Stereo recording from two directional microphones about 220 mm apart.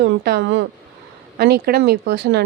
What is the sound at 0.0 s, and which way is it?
Speech, 45° right (ahead or behind).